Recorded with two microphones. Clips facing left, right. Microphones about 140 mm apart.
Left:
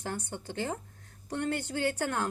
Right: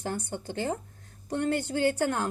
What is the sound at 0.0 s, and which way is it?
A woman's voice, 35° right (ahead or behind).